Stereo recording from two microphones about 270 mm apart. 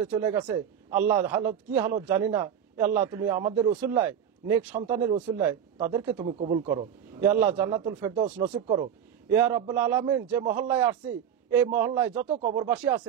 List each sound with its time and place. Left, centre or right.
0.0 s a man's voice: centre
4.0 s a man's voice: centre
6.2 s speech: right
6.7 s a man's voice: centre
12.3 s speech: right
12.6 s a man's voice: centre